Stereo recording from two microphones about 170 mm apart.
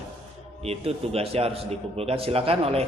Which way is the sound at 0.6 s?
35° right (ahead or behind).